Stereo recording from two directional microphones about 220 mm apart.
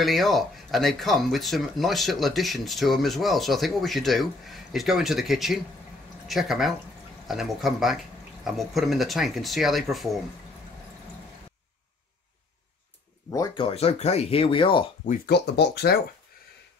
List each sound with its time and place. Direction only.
0.0 s speech: centre (ahead or behind)
13.3 s speech: 20° left (ahead or behind)
15.0 s speech: 50° left (ahead or behind)